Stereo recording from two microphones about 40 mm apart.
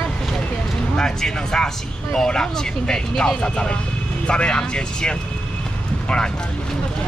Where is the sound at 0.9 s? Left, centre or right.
Centre.